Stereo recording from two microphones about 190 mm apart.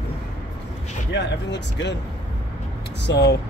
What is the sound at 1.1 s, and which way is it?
Speech, 65° left (ahead or behind).